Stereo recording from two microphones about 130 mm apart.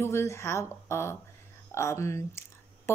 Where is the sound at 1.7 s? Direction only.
20° left (ahead or behind).